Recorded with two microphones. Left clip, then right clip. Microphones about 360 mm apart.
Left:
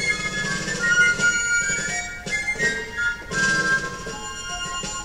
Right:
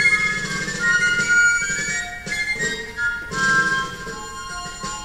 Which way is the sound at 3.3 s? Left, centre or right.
Left.